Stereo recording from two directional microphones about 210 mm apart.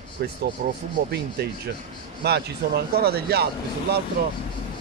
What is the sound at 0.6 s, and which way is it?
Speech, 40° right (ahead or behind).